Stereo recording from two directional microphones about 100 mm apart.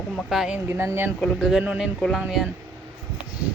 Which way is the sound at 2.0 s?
5° left (ahead or behind).